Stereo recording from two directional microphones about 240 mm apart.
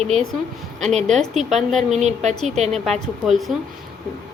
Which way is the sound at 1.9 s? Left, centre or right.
Right.